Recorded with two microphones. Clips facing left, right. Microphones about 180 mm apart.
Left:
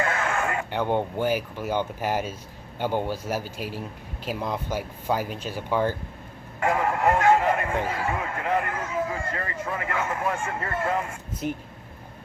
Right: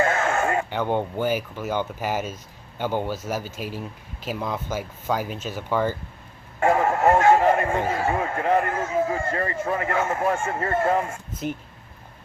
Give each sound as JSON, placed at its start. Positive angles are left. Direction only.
{"t": 0.0, "sound": "a sound", "side_deg": -40}
{"t": 0.7, "sound": "speech", "side_deg": 5}
{"t": 1.5, "sound": "a man's voice", "side_deg": 10}
{"t": 1.8, "sound": "speech", "side_deg": -5}
{"t": 2.8, "sound": "a man's voice", "side_deg": 10}
{"t": 3.4, "sound": "speech", "side_deg": -45}
{"t": 4.4, "sound": "a man's voice", "side_deg": 0}
{"t": 6.6, "sound": "speech", "side_deg": -30}
{"t": 6.9, "sound": "speech", "side_deg": -40}